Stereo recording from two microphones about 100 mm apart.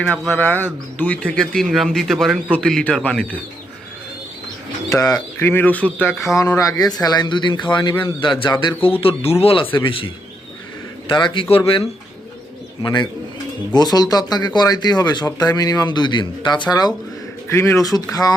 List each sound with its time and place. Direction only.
0.3 s speech: 20° left (ahead or behind)
1.4 s a man's voice: centre (ahead or behind)
5.4 s speech: 20° left (ahead or behind)
6.2 s a man's voice: 30° left (ahead or behind); by 10.1 s 60° left (ahead or behind)
11.1 s speech: 50° left (ahead or behind)
11.4 s speech: 75° left (ahead or behind)
12.8 s speech: 50° left (ahead or behind)
17.5 s speech: 25° left (ahead or behind)